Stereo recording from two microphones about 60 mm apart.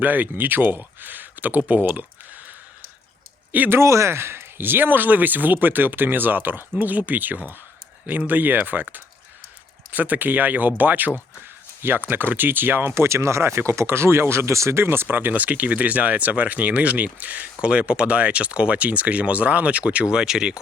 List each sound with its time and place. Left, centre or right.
0.0 s speech: right
3.7 s speech: right
15.0 s speech: right; by 20.6 s centre